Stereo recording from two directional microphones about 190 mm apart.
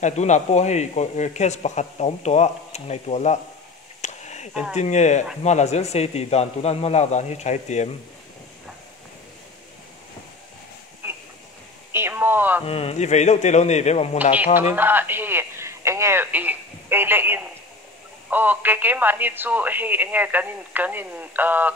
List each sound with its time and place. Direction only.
0.0 s a man's voice: 35° left (ahead or behind)
4.0 s a sound: 35° left (ahead or behind)
4.7 s a man's voice: 40° left (ahead or behind)
11.0 s a sound: 10° right (ahead or behind)
12.6 s a man's voice: 35° left (ahead or behind)
14.3 s speech: 10° right (ahead or behind)